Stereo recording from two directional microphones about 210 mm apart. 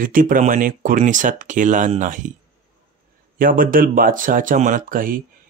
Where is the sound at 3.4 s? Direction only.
40° right (ahead or behind).